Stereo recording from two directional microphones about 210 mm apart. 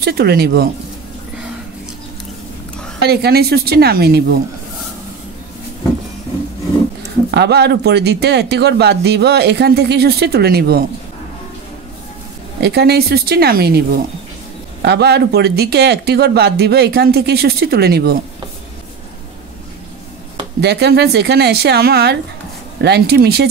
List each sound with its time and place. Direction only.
0.0 s speech: 50° right (ahead or behind)
3.0 s speech: 50° right (ahead or behind)
7.2 s speech: 50° right (ahead or behind)
12.5 s speech: 50° right (ahead or behind)
20.6 s speech: 50° right (ahead or behind)